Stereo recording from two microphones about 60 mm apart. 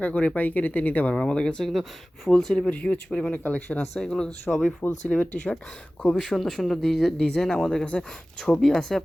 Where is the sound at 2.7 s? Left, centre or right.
Left.